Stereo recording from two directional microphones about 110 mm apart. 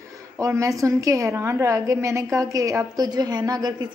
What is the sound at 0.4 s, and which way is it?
A woman's voice, 30° right (ahead or behind).